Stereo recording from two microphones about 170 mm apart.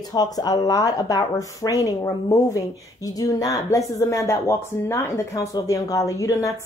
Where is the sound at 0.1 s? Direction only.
25° left (ahead or behind).